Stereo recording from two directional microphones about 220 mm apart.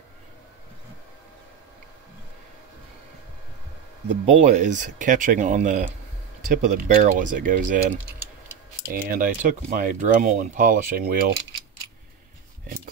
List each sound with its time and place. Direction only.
4.3 s speech: 35° right (ahead or behind)
8.9 s speech: 40° right (ahead or behind)